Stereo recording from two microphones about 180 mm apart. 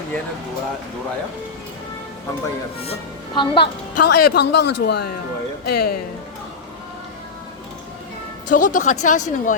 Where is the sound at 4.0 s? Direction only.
65° left (ahead or behind).